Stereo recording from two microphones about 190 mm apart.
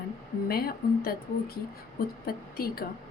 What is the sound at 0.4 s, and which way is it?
Speech, 50° left (ahead or behind).